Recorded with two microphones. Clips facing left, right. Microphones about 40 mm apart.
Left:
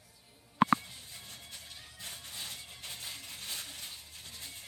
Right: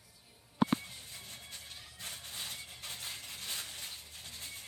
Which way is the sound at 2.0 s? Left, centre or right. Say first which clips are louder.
Even; right.